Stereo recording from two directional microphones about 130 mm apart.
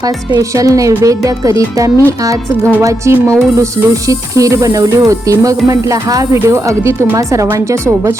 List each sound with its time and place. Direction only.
0.3 s music: 25° right (ahead or behind)